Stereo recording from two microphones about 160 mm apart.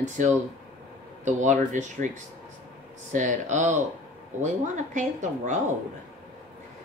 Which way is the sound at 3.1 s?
50° right (ahead or behind).